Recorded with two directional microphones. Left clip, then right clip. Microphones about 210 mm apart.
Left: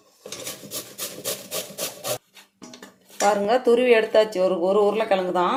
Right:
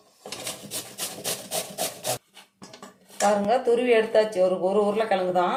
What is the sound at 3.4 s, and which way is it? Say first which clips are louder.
Speech: left 3 dB; 35° left (ahead or behind).